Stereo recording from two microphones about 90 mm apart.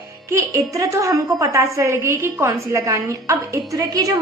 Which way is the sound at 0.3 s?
35° right (ahead or behind).